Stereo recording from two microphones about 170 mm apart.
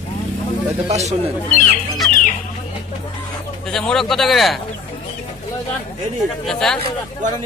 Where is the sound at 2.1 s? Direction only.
50° left (ahead or behind).